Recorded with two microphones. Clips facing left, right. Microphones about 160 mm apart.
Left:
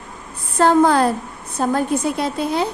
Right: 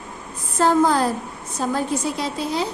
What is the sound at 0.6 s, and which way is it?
A woman's voice, 65° left (ahead or behind).